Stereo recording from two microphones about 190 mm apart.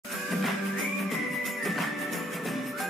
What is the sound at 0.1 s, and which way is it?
Music, centre (ahead or behind).